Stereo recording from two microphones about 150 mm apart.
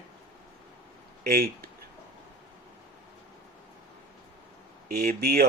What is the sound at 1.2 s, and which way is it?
Speech, 90° right.